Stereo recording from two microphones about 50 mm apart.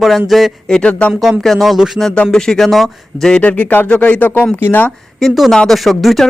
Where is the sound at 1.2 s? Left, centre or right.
Centre.